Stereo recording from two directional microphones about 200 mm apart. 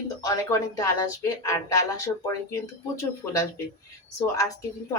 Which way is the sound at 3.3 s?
15° left (ahead or behind).